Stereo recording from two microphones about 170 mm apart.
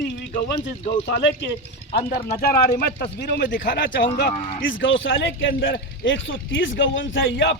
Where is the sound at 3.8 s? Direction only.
85° left.